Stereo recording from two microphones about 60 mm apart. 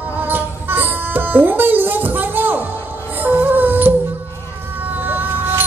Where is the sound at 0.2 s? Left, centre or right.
Right.